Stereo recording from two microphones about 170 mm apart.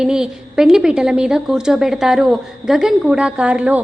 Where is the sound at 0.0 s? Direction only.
5° right (ahead or behind).